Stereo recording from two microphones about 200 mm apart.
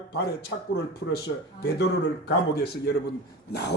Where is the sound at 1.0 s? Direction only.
75° left (ahead or behind).